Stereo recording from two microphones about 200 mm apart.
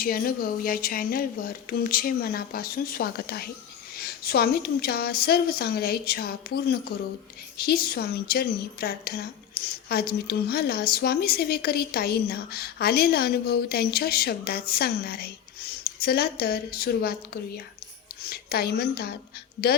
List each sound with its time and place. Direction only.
0.0 s a woman's voice: 45° left (ahead or behind)